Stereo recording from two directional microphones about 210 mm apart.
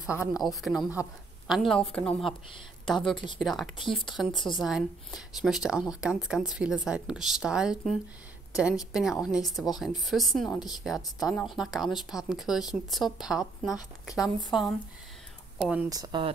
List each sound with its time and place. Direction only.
0.3 s speech: centre (ahead or behind)
15.9 s speech: 20° right (ahead or behind)